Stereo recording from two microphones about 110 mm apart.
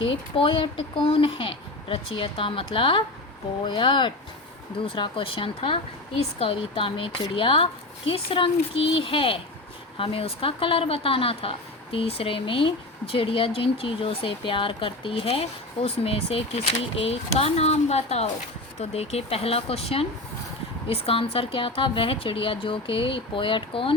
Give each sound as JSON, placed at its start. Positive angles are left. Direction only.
{"t": 0.0, "sound": "a woman's voice", "side_deg": 50}